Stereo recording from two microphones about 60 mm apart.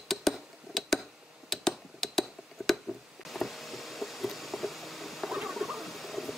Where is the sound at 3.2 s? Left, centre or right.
Centre.